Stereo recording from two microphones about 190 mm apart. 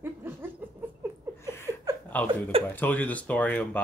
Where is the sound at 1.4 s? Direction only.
15° left (ahead or behind).